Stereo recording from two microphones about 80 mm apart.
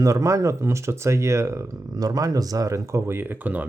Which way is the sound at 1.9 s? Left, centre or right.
Right.